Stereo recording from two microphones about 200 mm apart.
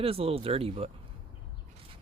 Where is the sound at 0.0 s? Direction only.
30° right (ahead or behind).